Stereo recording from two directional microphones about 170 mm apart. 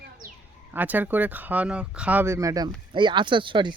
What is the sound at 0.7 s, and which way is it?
Speech, 10° right (ahead or behind).